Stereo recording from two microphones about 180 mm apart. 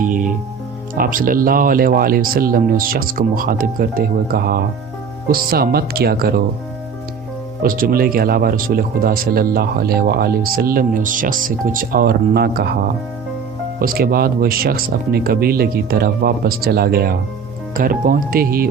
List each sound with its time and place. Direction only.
0.0 s music: 50° right (ahead or behind)
0.9 s speech: 50° right (ahead or behind)
7.6 s speech: 50° right (ahead or behind)
13.7 s speech: 55° right (ahead or behind)